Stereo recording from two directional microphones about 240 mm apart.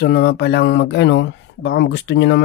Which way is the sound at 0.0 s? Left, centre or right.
Left.